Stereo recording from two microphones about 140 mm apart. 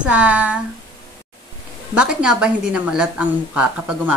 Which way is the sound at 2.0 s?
5° right (ahead or behind).